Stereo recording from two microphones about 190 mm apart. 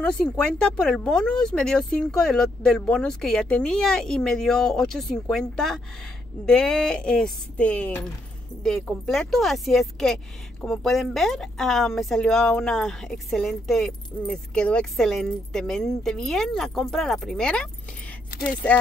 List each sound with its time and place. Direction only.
0.0 s speech: 5° left (ahead or behind)